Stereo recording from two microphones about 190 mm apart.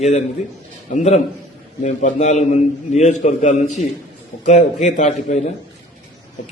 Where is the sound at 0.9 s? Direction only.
35° left (ahead or behind).